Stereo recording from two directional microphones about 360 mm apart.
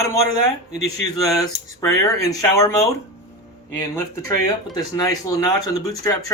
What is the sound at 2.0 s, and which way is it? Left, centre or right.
Speech, centre.